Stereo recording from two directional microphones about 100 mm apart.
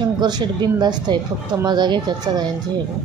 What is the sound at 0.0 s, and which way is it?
Speech, 45° right (ahead or behind).